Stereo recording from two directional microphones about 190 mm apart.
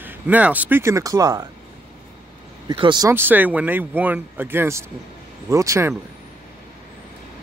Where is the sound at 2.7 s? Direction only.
25° right (ahead or behind).